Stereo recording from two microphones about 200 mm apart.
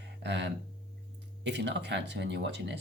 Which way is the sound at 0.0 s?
60° right (ahead or behind).